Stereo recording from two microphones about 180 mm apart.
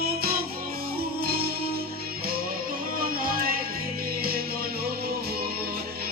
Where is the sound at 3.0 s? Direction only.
55° right (ahead or behind).